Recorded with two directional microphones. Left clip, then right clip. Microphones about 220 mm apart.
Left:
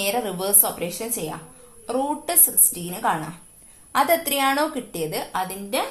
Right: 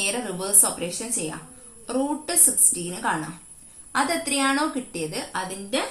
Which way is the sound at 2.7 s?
35° left (ahead or behind).